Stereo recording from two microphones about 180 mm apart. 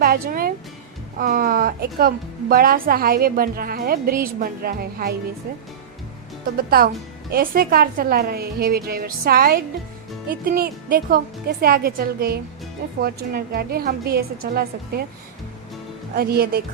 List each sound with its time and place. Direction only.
0.0 s a woman's voice: 55° right (ahead or behind)
6.6 s a woman's voice: 55° right (ahead or behind)
16.1 s a woman's voice: 60° right (ahead or behind)